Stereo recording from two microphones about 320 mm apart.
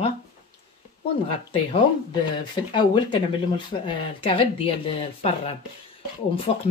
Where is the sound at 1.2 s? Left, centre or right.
Centre.